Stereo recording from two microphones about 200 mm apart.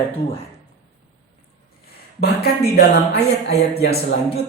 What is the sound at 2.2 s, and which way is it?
Speech, 55° left (ahead or behind).